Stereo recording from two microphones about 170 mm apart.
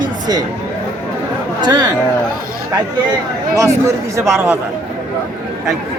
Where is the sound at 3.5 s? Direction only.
15° right (ahead or behind).